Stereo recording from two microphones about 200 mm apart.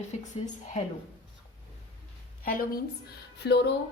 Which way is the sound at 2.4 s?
45° left (ahead or behind).